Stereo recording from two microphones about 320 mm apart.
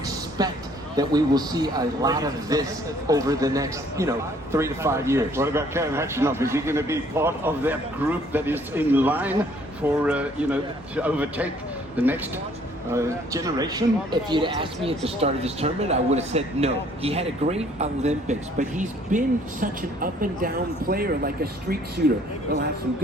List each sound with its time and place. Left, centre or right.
0.4 s speech: centre; by 21.8 s right